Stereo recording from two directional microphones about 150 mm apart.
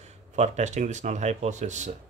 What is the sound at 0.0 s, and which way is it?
Speech, 50° right (ahead or behind).